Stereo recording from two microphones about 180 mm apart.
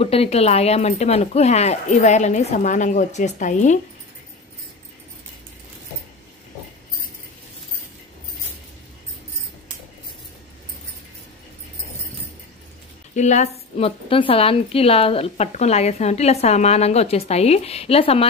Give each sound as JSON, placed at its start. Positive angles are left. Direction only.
{"t": 0.0, "sound": "a woman's voice", "side_deg": 35}
{"t": 13.1, "sound": "a woman's voice", "side_deg": 40}